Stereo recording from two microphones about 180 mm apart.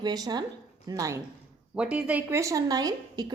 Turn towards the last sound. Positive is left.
turn(degrees=-20)  # may be behind; listen again after turning